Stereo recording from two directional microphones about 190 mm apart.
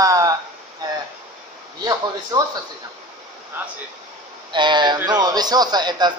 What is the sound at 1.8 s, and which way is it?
Speech, 20° right (ahead or behind).